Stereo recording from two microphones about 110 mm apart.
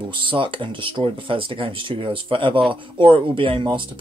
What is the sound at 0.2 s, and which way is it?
Speech, 50° right (ahead or behind).